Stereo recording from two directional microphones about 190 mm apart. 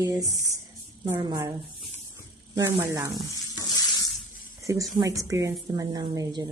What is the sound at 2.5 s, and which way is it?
Speech, 15° right (ahead or behind).